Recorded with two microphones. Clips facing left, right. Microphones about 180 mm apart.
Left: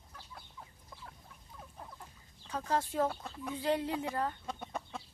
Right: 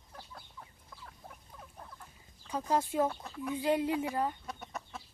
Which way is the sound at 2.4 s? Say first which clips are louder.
Right 2 dB; 15° right (ahead or behind).